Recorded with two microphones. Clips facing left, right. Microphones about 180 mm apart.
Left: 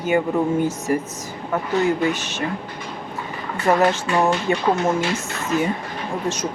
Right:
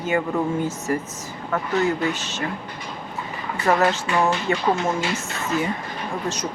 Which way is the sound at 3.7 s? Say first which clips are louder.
Left 2 dB; 15° left (ahead or behind).